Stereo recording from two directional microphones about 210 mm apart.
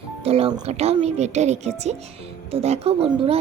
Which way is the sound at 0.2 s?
30° right (ahead or behind).